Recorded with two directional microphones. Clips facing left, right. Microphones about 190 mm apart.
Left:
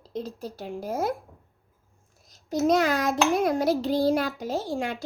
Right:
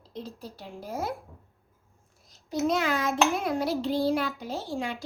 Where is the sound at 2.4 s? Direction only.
40° left (ahead or behind).